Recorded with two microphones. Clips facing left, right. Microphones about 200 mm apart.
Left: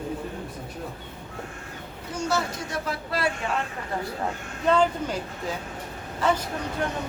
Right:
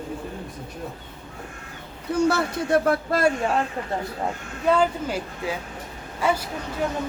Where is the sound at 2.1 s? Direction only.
60° right (ahead or behind).